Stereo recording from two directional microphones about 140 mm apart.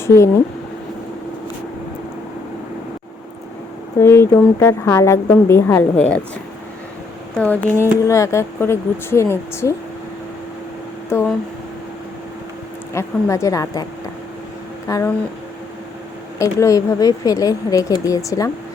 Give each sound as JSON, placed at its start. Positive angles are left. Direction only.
{"t": 0.0, "sound": "speech", "side_deg": 20}
{"t": 4.0, "sound": "speech", "side_deg": 20}
{"t": 7.3, "sound": "speech", "side_deg": 10}
{"t": 11.1, "sound": "a woman's voice", "side_deg": 20}
{"t": 12.9, "sound": "a woman's voice", "side_deg": 20}
{"t": 14.8, "sound": "speech", "side_deg": 25}
{"t": 16.4, "sound": "a woman's voice", "side_deg": 20}